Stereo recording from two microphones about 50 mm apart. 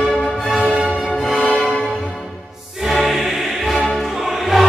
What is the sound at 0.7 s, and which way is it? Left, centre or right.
Music, right.